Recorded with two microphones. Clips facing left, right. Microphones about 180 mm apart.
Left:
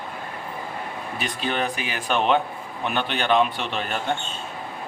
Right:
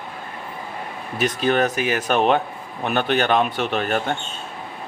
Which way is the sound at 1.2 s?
45° right (ahead or behind).